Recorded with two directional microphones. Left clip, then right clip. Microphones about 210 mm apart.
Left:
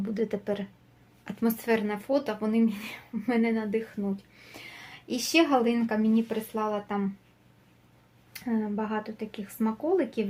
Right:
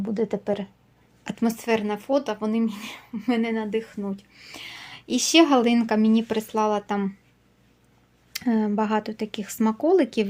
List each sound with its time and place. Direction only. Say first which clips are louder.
0.0 s speech: right 4 dB; 25° right (ahead or behind); by 7.1 s 45° right (ahead or behind)
8.3 s speech: right 7 dB; 45° right (ahead or behind)